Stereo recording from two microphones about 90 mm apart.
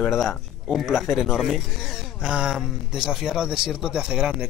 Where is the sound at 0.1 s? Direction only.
Centre (ahead or behind).